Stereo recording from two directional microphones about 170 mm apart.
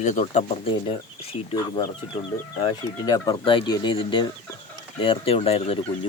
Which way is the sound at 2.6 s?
25° left (ahead or behind).